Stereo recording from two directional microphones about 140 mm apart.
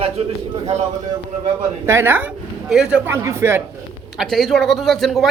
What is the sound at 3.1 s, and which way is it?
Speech, 20° right (ahead or behind).